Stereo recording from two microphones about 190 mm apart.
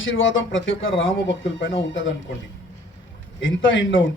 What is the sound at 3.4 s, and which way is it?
Speech, 80° left.